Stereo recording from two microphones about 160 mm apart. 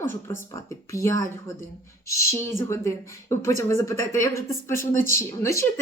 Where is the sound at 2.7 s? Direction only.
15° left (ahead or behind).